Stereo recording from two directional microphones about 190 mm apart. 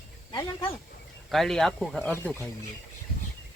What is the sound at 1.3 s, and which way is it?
Speech, centre (ahead or behind).